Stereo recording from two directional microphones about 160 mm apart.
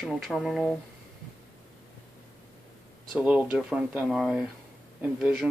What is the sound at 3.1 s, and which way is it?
Speech, 10° right (ahead or behind).